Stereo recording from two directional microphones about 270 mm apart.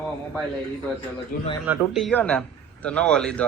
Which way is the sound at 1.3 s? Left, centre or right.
Left.